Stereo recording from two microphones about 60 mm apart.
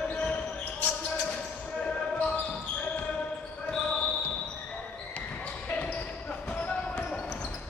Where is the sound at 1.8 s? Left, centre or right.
Centre.